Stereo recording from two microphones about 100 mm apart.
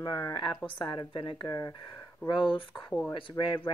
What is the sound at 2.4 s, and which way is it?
Speech, 60° left (ahead or behind).